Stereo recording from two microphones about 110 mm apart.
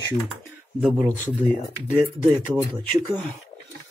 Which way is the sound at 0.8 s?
10° right (ahead or behind).